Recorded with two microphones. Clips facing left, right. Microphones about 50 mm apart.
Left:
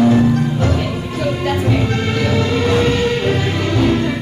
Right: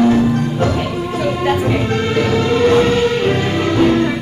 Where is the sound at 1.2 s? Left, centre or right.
Centre.